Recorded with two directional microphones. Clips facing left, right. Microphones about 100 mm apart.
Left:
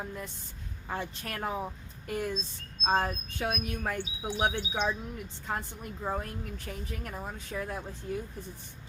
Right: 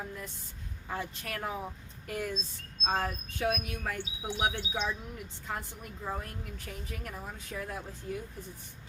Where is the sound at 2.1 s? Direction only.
30° left (ahead or behind).